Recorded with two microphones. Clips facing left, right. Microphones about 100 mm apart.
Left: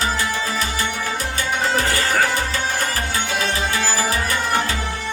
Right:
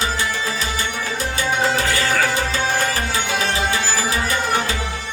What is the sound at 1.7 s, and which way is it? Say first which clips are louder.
Music: even; 40° left (ahead or behind).